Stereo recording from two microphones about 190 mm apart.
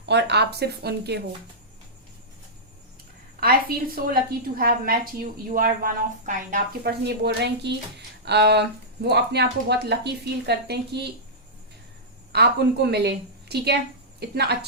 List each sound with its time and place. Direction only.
0.0 s speech: 65° right (ahead or behind)
3.4 s a woman's voice: 50° right (ahead or behind)
12.3 s speech: 60° right (ahead or behind)